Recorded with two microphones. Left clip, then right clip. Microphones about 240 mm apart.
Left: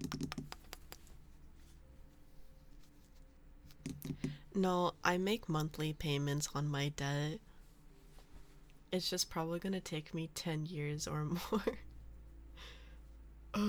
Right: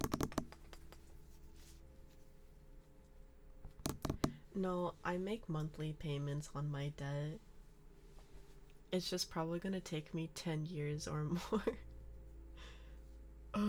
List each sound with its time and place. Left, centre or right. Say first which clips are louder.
0.3 s computer keyboard: right 2 dB; left
4.3 s speech: left 6 dB; left
8.9 s speech: left 3 dB; centre
12.5 s gasp: left 4 dB; centre
13.5 s music: left 2 dB; centre